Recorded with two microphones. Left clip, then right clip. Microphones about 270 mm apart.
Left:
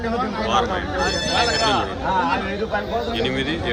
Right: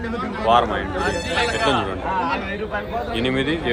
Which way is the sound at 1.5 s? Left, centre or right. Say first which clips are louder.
Left 1 dB; left.